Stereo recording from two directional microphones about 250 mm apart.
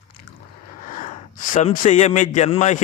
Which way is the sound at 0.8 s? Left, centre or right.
Left.